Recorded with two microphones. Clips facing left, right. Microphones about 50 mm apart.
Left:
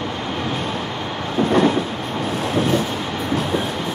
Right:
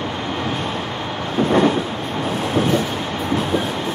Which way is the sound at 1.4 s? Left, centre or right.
Right.